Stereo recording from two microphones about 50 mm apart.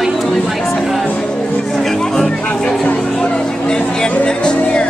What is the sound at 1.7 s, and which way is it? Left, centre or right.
Music, centre.